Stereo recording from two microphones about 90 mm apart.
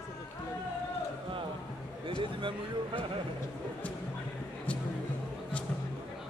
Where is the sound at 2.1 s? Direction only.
70° right (ahead or behind).